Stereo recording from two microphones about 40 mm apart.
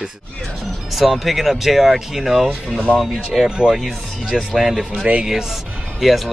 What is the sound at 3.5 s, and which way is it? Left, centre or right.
Speech, centre.